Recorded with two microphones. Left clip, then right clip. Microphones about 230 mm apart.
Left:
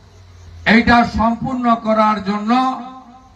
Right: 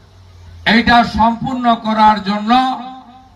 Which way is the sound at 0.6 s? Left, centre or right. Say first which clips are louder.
Right 1 dB; right.